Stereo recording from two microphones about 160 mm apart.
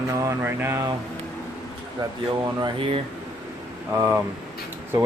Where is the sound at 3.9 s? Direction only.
10° right (ahead or behind).